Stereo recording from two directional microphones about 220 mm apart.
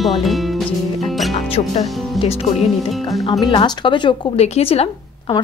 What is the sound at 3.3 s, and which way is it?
Speech, 20° left (ahead or behind).